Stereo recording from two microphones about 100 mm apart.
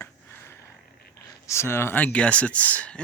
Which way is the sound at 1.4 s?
25° left (ahead or behind).